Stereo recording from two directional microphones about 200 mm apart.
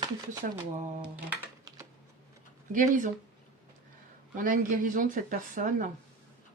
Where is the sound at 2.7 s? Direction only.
40° right (ahead or behind).